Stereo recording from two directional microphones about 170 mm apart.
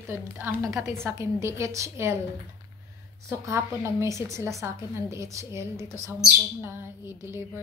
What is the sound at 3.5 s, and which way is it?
A woman's voice, 15° right (ahead or behind).